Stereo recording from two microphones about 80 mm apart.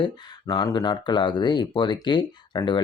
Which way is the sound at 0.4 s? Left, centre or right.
Left.